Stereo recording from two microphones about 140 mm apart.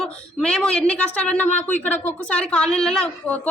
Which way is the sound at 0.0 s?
5° left (ahead or behind).